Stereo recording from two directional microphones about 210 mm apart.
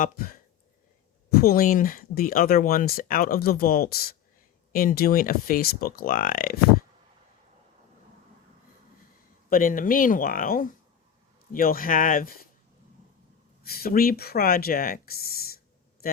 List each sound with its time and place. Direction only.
0.0 s speech: 45° left (ahead or behind)
9.5 s speech: 40° left (ahead or behind)
13.7 s speech: 45° left (ahead or behind)